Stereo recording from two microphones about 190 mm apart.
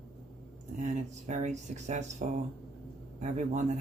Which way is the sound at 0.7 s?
40° right (ahead or behind).